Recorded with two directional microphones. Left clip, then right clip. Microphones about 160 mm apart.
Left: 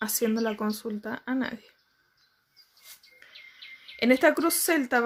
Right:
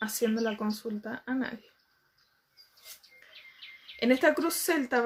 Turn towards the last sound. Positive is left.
turn(degrees=30)  # may be behind; listen again after turning